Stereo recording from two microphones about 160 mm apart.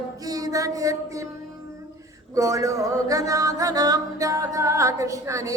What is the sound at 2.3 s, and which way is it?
Music, 20° right (ahead or behind).